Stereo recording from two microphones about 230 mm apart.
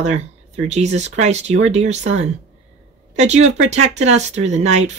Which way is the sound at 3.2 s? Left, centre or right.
Right.